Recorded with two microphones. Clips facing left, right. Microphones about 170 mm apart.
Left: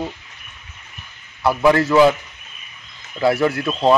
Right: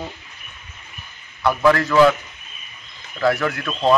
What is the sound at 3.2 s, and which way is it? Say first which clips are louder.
Speech: left 3 dB; 25° left (ahead or behind).